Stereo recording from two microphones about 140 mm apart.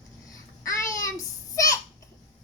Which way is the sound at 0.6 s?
25° left (ahead or behind).